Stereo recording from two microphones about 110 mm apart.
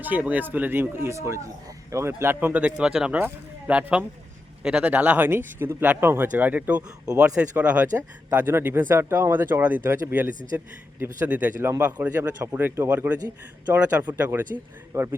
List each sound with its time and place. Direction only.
0.0 s speech: 15° right (ahead or behind)